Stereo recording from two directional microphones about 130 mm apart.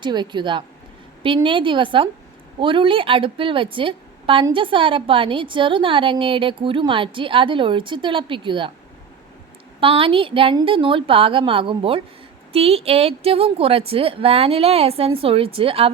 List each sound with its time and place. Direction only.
0.0 s a woman's voice: 35° right (ahead or behind)
9.8 s a woman's voice: 45° right (ahead or behind)